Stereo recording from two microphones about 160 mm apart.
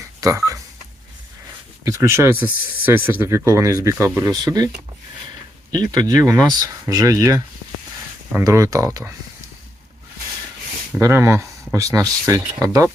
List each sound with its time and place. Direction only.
0.2 s telephone dialing: 20° right (ahead or behind)
1.8 s speech: 20° right (ahead or behind)
5.7 s speech: 25° right (ahead or behind)
11.0 s speech: 15° right (ahead or behind)